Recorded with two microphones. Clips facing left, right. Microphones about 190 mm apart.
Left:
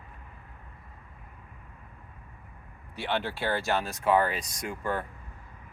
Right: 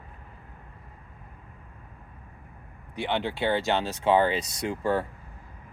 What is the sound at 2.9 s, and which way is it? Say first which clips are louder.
Speech: right 2 dB; 15° right (ahead or behind).